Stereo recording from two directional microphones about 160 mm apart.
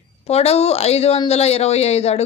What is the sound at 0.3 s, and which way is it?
A woman's voice, 40° left (ahead or behind).